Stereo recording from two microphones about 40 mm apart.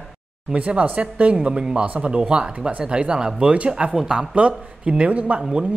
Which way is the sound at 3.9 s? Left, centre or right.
Centre.